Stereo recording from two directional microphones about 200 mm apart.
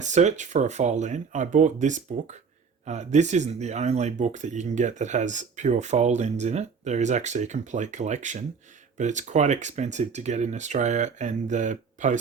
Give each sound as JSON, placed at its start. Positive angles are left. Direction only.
{"t": 0.0, "sound": "speech", "side_deg": -35}